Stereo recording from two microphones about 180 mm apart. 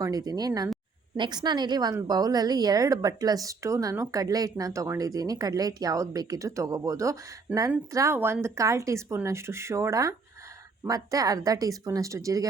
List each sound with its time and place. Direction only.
0.0 s a woman's voice: 20° right (ahead or behind)